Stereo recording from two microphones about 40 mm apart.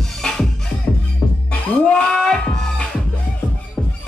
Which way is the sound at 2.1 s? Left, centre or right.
Centre.